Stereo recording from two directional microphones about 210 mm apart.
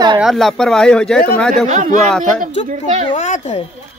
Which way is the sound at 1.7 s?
35° right (ahead or behind).